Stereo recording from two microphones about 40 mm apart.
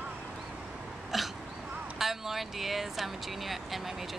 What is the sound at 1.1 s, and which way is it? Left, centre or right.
Throat clearing, centre.